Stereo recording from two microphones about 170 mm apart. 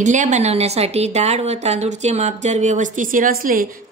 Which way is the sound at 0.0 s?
45° right (ahead or behind).